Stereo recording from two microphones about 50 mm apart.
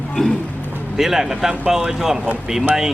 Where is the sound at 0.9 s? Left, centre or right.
Centre.